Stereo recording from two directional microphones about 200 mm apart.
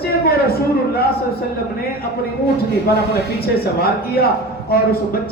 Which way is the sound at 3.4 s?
50° left (ahead or behind).